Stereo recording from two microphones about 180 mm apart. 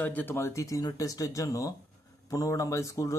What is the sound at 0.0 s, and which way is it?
Speech, 10° left (ahead or behind).